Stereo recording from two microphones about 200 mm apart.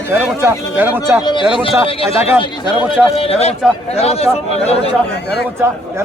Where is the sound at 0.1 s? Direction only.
10° right (ahead or behind).